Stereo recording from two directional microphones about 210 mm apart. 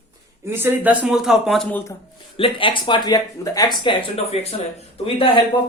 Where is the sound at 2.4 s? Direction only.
25° left (ahead or behind).